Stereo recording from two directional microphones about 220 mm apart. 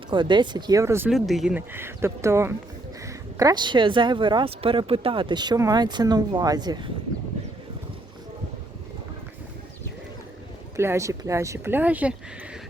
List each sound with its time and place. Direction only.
0.1 s speech: 20° right (ahead or behind)
10.8 s speech: 15° right (ahead or behind)